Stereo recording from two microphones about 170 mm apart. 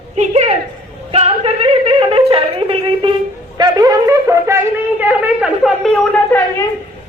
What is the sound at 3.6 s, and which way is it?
Shofar, 25° right (ahead or behind).